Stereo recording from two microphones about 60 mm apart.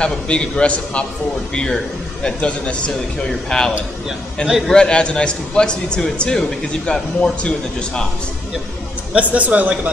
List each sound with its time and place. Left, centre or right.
0.0 s a man's voice: centre
9.1 s a man's voice: right